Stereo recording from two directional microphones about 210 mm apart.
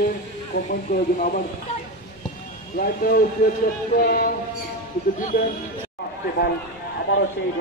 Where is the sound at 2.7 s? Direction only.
45° left (ahead or behind).